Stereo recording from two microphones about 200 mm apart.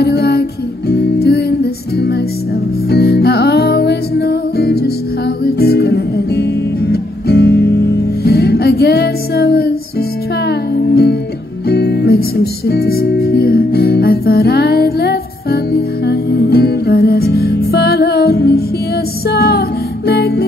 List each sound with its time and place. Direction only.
0.0 s music: 55° left (ahead or behind)
11.7 s music: 55° left (ahead or behind)